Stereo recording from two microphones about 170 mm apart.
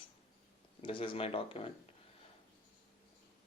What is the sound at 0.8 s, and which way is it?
Speech, 30° left (ahead or behind).